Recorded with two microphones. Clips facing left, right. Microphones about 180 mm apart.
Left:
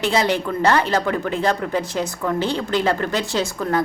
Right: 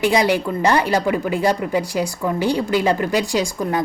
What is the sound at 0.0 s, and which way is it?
A woman's voice, 15° right (ahead or behind).